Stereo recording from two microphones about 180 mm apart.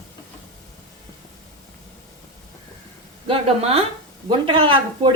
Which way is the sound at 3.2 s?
35° right (ahead or behind).